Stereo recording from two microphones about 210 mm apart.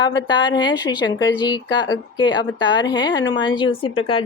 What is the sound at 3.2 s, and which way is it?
Speech, 60° left (ahead or behind).